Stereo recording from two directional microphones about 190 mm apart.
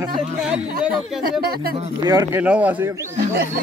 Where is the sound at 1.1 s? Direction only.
Centre (ahead or behind).